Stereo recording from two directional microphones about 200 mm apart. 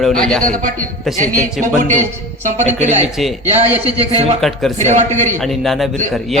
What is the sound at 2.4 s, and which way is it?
Speech, 35° right (ahead or behind).